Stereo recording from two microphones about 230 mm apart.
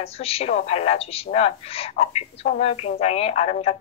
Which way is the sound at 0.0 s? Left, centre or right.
Left.